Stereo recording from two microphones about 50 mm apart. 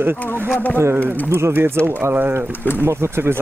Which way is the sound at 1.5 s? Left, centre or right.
Right.